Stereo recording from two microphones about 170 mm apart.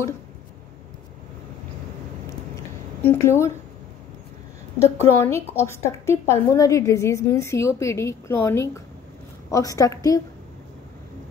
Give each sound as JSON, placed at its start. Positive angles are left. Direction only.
{"t": 3.1, "sound": "a woman's voice", "side_deg": 15}
{"t": 4.8, "sound": "a woman's voice", "side_deg": 15}